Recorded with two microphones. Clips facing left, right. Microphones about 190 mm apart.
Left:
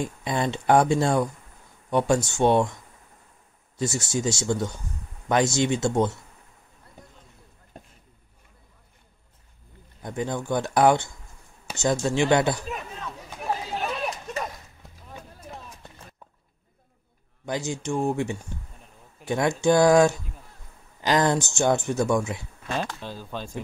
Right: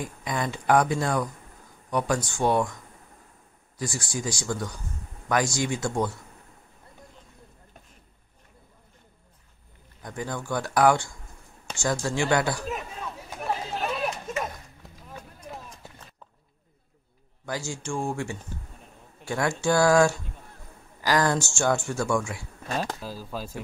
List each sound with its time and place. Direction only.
0.0 s speech: 25° left (ahead or behind)
3.7 s speech: 25° left (ahead or behind)
10.0 s speech: 20° left (ahead or behind)
13.7 s a sound: centre (ahead or behind)
17.5 s speech: 20° left (ahead or behind)
22.9 s speech: 5° right (ahead or behind)